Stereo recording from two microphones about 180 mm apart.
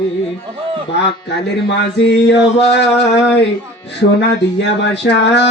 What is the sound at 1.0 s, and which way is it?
A man's voice, 70° left (ahead or behind).